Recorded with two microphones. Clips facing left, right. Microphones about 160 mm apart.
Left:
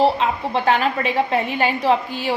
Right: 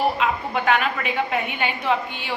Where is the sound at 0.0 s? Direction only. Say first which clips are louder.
Left 4 dB; 30° left (ahead or behind).